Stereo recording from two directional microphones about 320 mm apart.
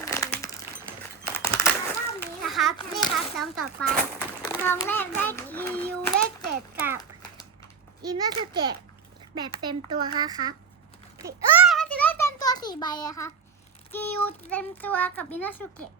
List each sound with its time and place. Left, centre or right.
0.0 s a sound: centre
3.3 s a child's voice: centre
6.7 s a child's voice: centre
8.0 s a child's voice: centre
11.2 s a sound: centre
13.9 s a child's voice: centre